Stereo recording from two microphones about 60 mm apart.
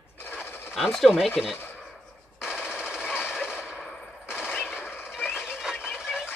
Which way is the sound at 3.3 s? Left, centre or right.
Centre.